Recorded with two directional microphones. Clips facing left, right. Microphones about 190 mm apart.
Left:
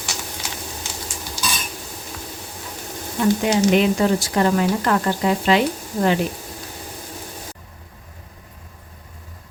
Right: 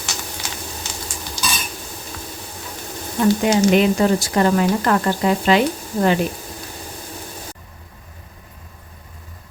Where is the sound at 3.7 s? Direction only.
45° right (ahead or behind).